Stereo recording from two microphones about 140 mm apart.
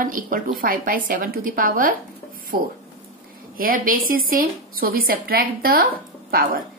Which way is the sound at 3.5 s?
90° right.